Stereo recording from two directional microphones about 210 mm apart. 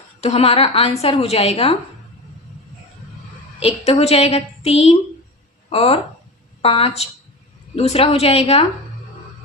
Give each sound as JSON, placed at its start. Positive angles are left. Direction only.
{"t": 0.2, "sound": "a woman's voice", "side_deg": 30}
{"t": 3.6, "sound": "a woman's voice", "side_deg": 30}